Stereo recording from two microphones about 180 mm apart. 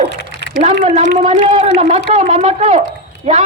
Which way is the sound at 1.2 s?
35° right (ahead or behind).